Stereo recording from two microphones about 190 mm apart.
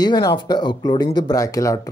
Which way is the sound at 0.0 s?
20° left (ahead or behind).